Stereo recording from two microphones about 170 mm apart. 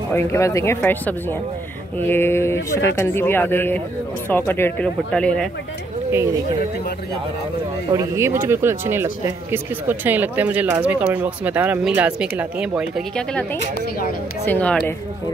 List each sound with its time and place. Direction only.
0.1 s speech: 15° left (ahead or behind)
7.9 s speech: 20° right (ahead or behind); by 15.0 s 10° left (ahead or behind)